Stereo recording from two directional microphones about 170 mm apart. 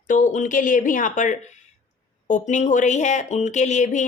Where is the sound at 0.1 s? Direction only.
50° left (ahead or behind).